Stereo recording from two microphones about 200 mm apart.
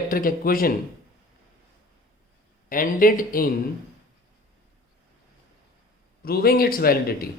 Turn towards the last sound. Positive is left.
turn(degrees=50)  # may be behind; listen again after turning